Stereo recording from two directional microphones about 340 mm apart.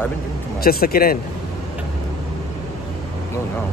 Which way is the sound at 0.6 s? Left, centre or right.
Left.